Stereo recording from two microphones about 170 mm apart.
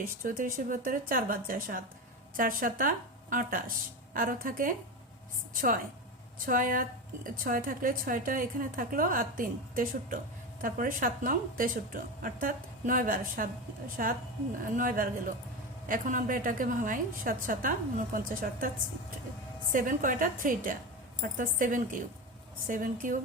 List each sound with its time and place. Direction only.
0.2 s a woman's voice: 55° right (ahead or behind)
19.7 s a woman's voice: 55° right (ahead or behind)